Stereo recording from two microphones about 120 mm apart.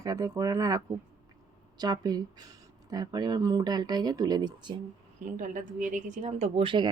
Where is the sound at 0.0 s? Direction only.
30° right (ahead or behind).